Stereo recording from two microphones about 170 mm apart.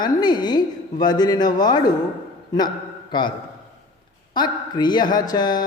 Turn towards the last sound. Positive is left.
turn(degrees=25)  # may be behind; listen again after turning